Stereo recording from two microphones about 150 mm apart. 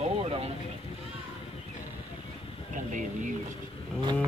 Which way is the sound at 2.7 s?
55° right (ahead or behind).